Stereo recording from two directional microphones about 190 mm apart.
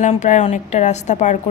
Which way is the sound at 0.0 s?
40° left (ahead or behind).